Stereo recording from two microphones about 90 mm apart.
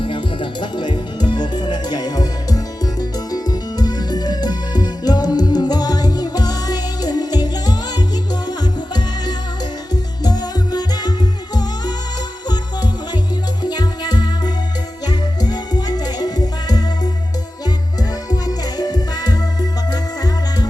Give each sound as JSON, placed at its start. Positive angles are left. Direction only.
{"t": 0.0, "sound": "music", "side_deg": 70}
{"t": 13.6, "sound": "music", "side_deg": 50}
{"t": 18.3, "sound": "music", "side_deg": 45}